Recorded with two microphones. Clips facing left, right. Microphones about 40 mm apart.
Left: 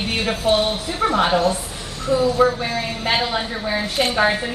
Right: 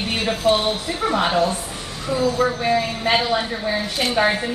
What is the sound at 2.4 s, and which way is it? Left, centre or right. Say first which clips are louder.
A woman's voice: left 1 dB; centre.